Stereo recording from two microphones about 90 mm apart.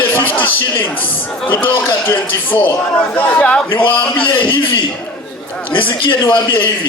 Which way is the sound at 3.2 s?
15° left (ahead or behind).